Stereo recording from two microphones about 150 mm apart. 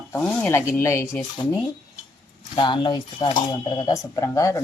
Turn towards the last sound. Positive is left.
turn(degrees=20)  # may be behind; listen again after turning